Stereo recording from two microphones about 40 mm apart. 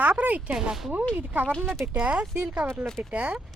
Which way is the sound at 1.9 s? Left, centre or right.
Right.